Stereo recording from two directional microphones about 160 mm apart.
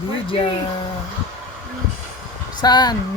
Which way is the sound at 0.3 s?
30° left (ahead or behind).